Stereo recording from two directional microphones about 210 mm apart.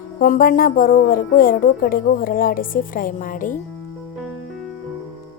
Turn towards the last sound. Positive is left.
turn(degrees=40)  # may be behind; listen again after turning